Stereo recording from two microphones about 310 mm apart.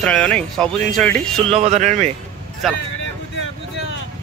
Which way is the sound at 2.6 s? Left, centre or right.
Centre.